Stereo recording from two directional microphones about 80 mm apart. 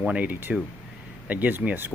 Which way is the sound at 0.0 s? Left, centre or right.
Centre.